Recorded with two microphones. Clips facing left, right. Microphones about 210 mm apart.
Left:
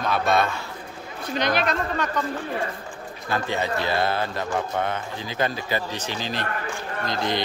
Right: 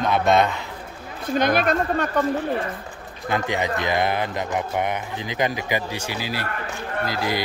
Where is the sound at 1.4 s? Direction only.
50° right (ahead or behind).